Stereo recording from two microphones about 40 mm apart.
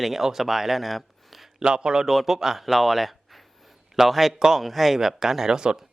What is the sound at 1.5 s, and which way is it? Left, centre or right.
Speech, right.